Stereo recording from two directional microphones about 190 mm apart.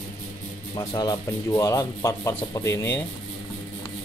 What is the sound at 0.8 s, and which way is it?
Speech, 20° left (ahead or behind).